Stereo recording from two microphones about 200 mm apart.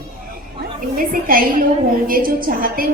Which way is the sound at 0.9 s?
45° right (ahead or behind).